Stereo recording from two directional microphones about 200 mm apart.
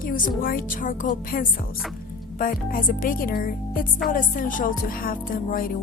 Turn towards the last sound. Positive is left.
turn(degrees=45)  # may be behind; listen again after turning